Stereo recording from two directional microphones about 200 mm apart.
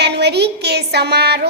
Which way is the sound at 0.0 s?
55° right (ahead or behind).